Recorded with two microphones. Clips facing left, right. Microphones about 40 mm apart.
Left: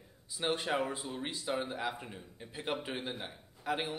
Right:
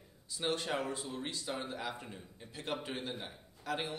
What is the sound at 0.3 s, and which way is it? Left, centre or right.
Speech, centre.